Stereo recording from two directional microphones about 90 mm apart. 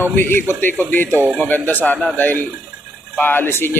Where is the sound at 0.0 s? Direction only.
25° left (ahead or behind).